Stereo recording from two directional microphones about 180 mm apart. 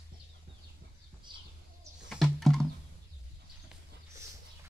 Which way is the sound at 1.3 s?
25° right (ahead or behind).